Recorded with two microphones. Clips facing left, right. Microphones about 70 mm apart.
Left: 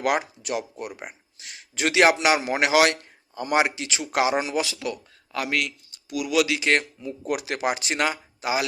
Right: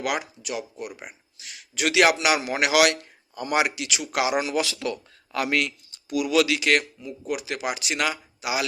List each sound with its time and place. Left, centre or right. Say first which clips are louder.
0.0 s speech: left 4 dB; left; by 4.9 s centre
5.3 s a man's voice: right 2 dB; centre
6.4 s speech: even; left
7.3 s speech: left 3 dB; left